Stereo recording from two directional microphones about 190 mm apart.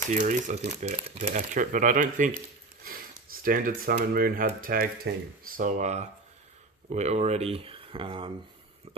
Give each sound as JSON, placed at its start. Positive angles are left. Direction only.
{"t": 0.1, "sound": "speech", "side_deg": -40}
{"t": 3.4, "sound": "speech", "side_deg": -45}
{"t": 5.1, "sound": "speech", "side_deg": -60}
{"t": 5.6, "sound": "speech", "side_deg": -40}